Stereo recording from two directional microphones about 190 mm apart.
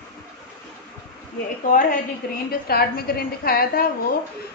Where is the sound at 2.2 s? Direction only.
55° left (ahead or behind).